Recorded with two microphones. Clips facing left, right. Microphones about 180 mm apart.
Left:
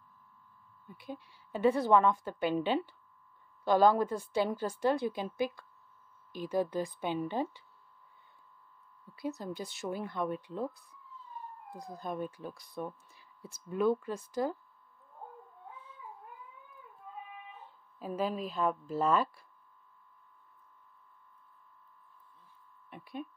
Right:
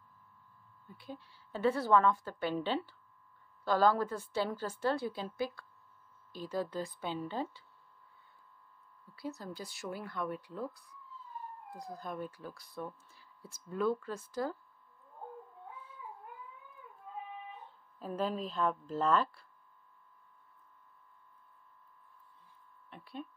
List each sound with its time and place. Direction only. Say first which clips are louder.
0.8 s a woman's voice: left 3 dB; 15° left (ahead or behind)
9.1 s a woman's voice: left 4 dB; 20° left (ahead or behind)
17.9 s a woman's voice: left 1 dB; 10° left (ahead or behind)
22.8 s a sound: left 3 dB; 15° left (ahead or behind)